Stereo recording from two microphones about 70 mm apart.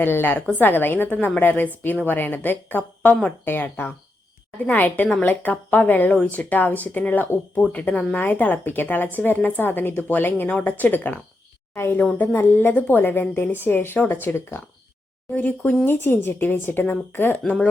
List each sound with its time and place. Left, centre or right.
0.0 s a woman's voice: left